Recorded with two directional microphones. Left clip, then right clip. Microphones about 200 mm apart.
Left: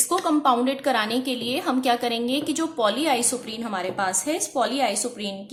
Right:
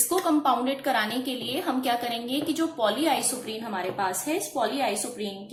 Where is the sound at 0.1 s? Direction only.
30° left (ahead or behind).